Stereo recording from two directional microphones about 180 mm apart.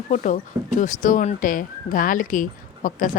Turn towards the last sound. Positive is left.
turn(degrees=45)  # may be behind; listen again after turning